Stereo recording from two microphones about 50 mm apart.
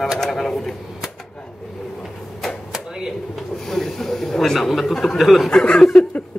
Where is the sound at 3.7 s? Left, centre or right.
Centre.